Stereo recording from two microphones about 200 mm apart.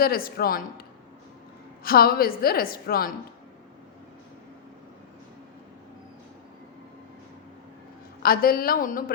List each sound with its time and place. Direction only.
0.0 s a woman's voice: 50° left (ahead or behind)
1.8 s a woman's voice: 50° left (ahead or behind)
8.2 s a woman's voice: 45° left (ahead or behind)